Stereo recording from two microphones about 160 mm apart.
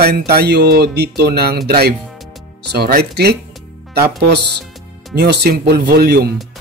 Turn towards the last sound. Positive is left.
turn(degrees=-80)